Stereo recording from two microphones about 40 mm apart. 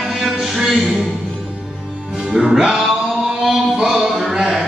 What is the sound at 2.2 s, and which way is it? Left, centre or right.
Music, centre.